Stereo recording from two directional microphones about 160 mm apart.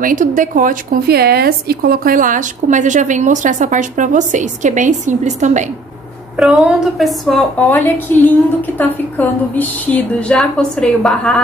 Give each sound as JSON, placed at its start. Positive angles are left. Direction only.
{"t": 0.0, "sound": "speech", "side_deg": -55}
{"t": 6.3, "sound": "a woman's voice", "side_deg": -5}